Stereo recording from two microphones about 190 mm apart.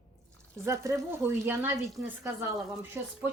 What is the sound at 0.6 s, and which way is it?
Speech, 15° right (ahead or behind).